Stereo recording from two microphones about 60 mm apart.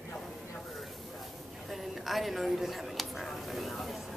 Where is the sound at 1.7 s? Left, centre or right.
Centre.